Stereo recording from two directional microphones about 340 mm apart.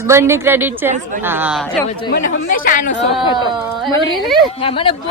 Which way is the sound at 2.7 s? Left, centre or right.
Left.